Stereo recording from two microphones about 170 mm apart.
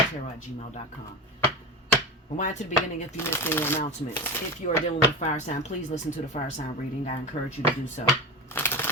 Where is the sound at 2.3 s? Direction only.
45° left (ahead or behind).